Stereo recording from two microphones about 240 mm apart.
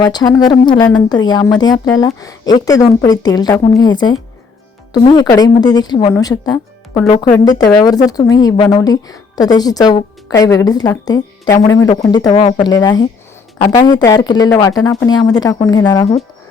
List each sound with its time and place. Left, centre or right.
0.0 s speech: centre